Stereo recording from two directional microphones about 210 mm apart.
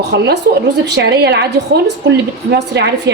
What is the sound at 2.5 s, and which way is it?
Speech, 55° right (ahead or behind).